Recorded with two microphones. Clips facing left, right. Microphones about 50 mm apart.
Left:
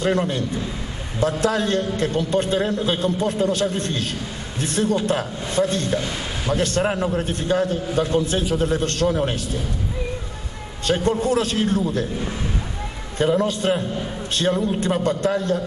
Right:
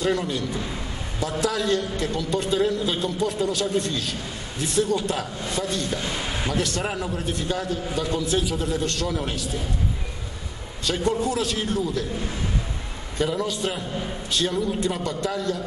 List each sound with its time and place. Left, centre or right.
0.0 s a man's voice: left
10.9 s a man's voice: left
13.2 s a man's voice: left